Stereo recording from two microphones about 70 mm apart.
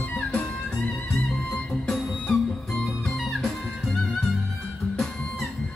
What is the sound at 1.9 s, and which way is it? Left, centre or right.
Music, centre.